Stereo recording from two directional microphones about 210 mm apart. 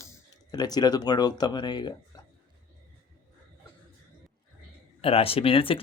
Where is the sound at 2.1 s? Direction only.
20° left (ahead or behind).